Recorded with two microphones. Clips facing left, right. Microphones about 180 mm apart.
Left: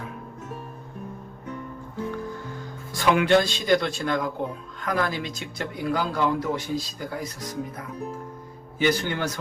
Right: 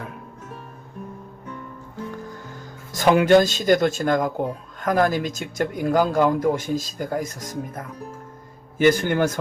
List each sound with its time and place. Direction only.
2.9 s speech: 40° right (ahead or behind)